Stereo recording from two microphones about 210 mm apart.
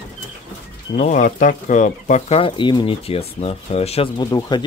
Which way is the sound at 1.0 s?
35° left (ahead or behind).